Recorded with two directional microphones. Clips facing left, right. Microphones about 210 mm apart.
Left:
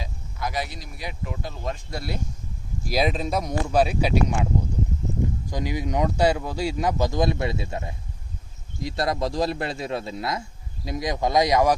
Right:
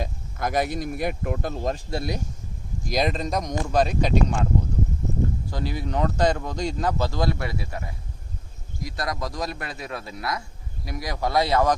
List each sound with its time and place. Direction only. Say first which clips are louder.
0.0 s speech: right 4 dB; 50° right (ahead or behind)
1.7 s speech: right 3 dB; 25° right (ahead or behind)
2.8 s speech: left 1 dB; 5° left (ahead or behind)
5.5 s speech: left 2 dB; 15° left (ahead or behind)